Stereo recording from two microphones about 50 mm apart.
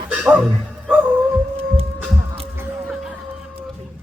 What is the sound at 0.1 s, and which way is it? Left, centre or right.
Music, right.